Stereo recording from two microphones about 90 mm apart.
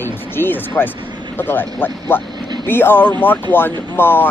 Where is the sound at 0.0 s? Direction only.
25° left (ahead or behind).